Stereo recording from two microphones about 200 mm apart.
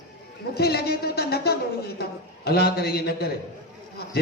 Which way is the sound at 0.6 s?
50° left (ahead or behind).